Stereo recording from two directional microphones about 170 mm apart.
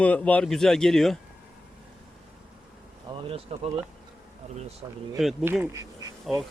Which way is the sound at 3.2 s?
35° right (ahead or behind).